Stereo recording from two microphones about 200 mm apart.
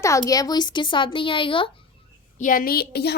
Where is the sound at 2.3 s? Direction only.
40° left (ahead or behind).